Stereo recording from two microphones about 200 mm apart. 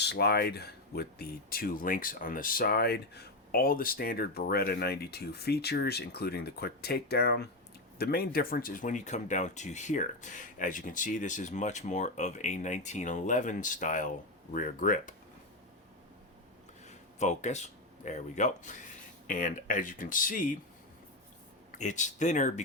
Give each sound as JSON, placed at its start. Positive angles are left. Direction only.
{"t": 0.0, "sound": "speech", "side_deg": 55}
{"t": 16.8, "sound": "speech", "side_deg": 35}
{"t": 21.8, "sound": "speech", "side_deg": 35}